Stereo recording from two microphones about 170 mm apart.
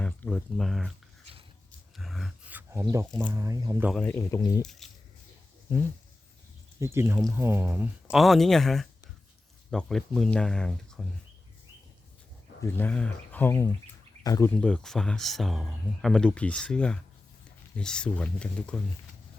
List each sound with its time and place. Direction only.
0.0 s speech: 5° left (ahead or behind)
1.2 s a sound: 35° right (ahead or behind)
2.0 s a sound: centre (ahead or behind)
2.8 s speech: 15° right (ahead or behind)
4.0 s speech: 15° left (ahead or behind)
4.8 s a sound: centre (ahead or behind)
6.7 s speech: 15° right (ahead or behind)
8.1 s speech: centre (ahead or behind)
12.6 s speech: 10° left (ahead or behind)
14.5 s speech: 5° left (ahead or behind)